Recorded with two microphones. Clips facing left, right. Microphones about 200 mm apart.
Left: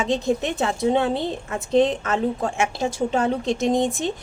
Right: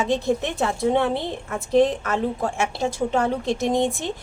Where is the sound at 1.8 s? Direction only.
20° left (ahead or behind).